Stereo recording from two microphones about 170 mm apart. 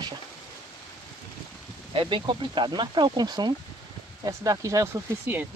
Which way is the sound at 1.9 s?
30° right (ahead or behind).